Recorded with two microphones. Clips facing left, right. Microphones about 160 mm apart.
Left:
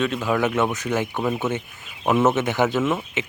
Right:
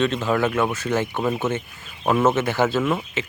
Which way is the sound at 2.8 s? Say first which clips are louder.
Even; 5° left (ahead or behind).